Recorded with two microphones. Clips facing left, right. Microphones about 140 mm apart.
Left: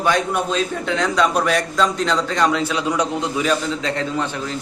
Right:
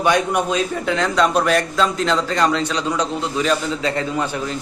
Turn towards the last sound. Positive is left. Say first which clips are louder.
# right 1 dB
turn(degrees=-5)  # may be behind; listen again after turning